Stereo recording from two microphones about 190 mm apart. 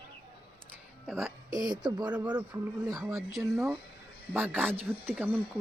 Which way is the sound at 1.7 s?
20° right (ahead or behind).